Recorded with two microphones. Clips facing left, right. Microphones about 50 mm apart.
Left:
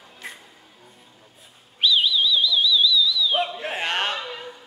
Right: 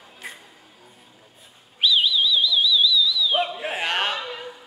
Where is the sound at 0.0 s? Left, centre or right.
Centre.